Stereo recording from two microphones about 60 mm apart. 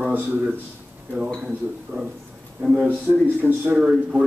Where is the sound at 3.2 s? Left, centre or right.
Right.